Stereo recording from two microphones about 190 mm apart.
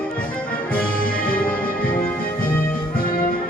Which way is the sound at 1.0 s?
50° left (ahead or behind).